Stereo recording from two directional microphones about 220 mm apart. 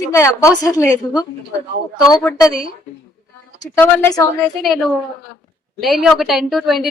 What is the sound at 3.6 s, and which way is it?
Speech, 15° left (ahead or behind).